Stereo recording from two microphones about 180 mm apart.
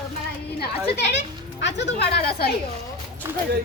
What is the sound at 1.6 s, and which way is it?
Speech, 70° left (ahead or behind).